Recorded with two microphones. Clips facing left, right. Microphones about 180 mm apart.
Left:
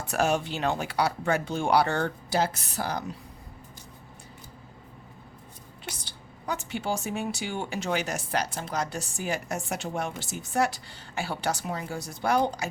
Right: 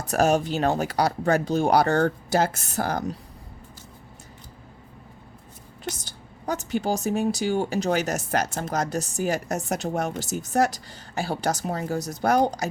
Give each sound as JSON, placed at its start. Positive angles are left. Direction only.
{"t": 0.0, "sound": "a woman's voice", "side_deg": -40}
{"t": 5.8, "sound": "a woman's voice", "side_deg": -45}